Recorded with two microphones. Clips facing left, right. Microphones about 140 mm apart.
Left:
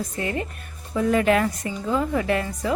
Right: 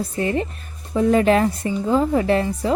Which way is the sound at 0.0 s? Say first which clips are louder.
Right 5 dB; 30° right (ahead or behind).